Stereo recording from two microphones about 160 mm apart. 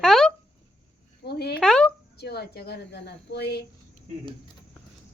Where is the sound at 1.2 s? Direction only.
90° left.